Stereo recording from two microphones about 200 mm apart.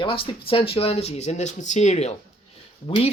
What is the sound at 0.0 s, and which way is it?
Speech, 25° left (ahead or behind).